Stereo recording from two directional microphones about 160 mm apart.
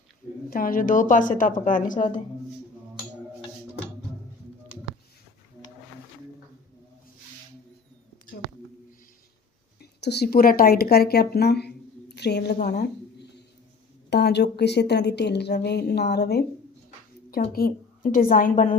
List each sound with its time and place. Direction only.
0.5 s a woman's voice: 60° left (ahead or behind)
10.0 s speech: 90° left
12.8 s a sound: 90° left
14.1 s a woman's voice: 90° left
17.6 s a woman's voice: 65° left (ahead or behind)